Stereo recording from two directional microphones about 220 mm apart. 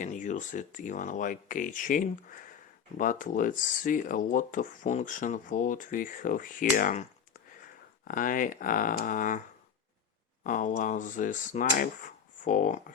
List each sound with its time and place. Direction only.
0.0 s speech: 35° left (ahead or behind)
8.0 s speech: 40° left (ahead or behind)
10.4 s speech: 35° left (ahead or behind)